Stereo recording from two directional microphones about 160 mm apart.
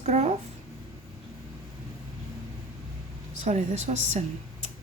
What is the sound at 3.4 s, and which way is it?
Speech, 45° right (ahead or behind).